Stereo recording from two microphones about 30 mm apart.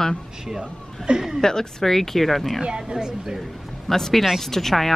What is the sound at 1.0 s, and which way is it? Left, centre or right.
Speech, centre.